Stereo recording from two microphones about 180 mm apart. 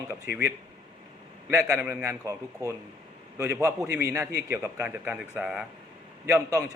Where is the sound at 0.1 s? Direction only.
15° right (ahead or behind).